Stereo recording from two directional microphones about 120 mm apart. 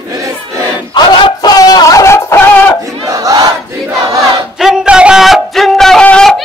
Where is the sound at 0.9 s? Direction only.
35° left (ahead or behind); by 2.7 s 15° left (ahead or behind).